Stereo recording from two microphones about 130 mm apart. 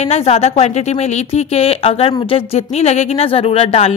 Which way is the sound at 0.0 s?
55° left (ahead or behind).